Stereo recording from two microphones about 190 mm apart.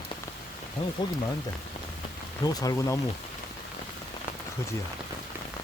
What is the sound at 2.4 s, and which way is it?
Speech, 20° left (ahead or behind).